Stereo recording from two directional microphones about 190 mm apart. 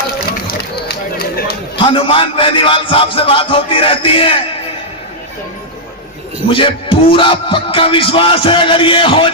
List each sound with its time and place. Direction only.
0.4 s run: 55° left (ahead or behind)
1.7 s speech: 25° left (ahead or behind)
6.5 s speech: 30° left (ahead or behind)